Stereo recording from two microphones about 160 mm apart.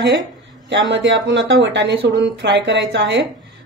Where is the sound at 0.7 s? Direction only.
90° right.